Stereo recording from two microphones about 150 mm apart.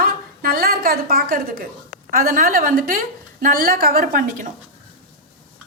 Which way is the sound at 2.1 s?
65° right (ahead or behind).